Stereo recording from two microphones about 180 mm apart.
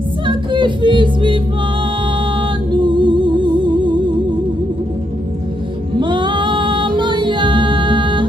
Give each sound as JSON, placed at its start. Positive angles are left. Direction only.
{"t": 0.3, "sound": "music", "side_deg": -25}
{"t": 2.7, "sound": "music", "side_deg": -25}
{"t": 5.9, "sound": "music", "side_deg": -25}